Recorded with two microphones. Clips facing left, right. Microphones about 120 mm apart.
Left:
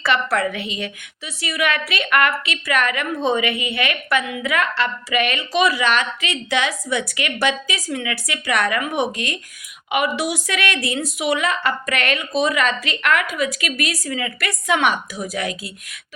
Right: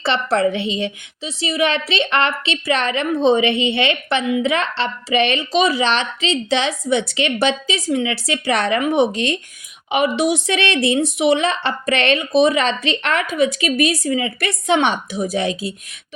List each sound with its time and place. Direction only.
0.0 s a woman's voice: 30° right (ahead or behind)